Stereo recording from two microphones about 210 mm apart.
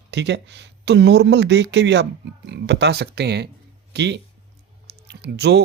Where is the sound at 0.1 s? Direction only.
55° right (ahead or behind).